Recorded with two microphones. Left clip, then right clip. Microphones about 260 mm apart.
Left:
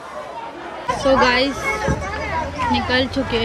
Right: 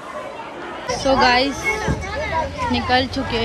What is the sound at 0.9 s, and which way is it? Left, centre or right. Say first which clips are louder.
Speech: even; centre.